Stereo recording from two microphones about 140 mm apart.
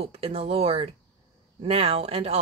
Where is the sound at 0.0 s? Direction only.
45° right (ahead or behind).